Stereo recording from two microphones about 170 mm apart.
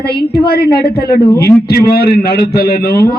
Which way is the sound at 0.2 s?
70° left (ahead or behind).